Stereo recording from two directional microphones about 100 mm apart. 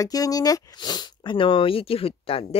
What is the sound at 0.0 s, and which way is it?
Speech, 35° left (ahead or behind).